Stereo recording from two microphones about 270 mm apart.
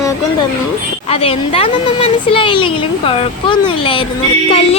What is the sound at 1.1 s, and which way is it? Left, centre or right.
A woman's voice, left.